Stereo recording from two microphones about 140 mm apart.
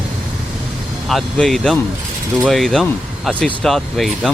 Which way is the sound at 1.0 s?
Centre (ahead or behind).